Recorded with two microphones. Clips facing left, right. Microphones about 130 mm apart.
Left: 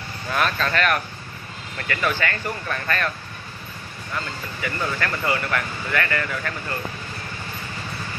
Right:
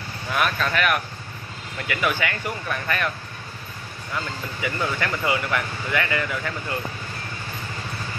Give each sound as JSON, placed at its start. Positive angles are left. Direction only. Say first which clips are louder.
{"t": 0.3, "sound": "speech", "louder": "left 1 dB", "side_deg": -5}
{"t": 4.6, "sound": "speech", "louder": "even", "side_deg": -15}